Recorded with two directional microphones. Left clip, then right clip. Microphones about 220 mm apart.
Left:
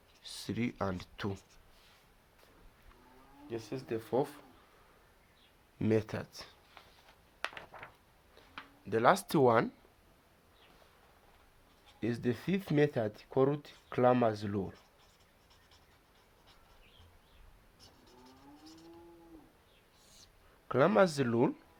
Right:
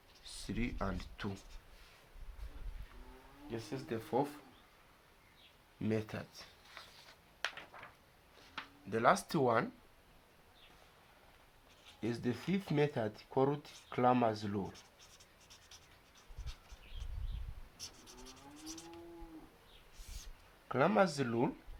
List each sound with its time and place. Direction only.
0.3 s speech: 45° left (ahead or behind)
3.5 s speech: 45° left (ahead or behind)
5.8 s speech: 50° left (ahead or behind)
8.9 s speech: 45° left (ahead or behind)
11.9 s speech: 35° left (ahead or behind)
20.7 s speech: 40° left (ahead or behind)